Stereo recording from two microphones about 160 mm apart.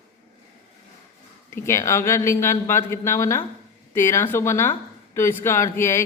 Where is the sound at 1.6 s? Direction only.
15° left (ahead or behind).